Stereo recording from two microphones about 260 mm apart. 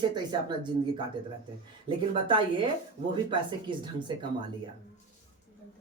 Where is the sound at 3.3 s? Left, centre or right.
Centre.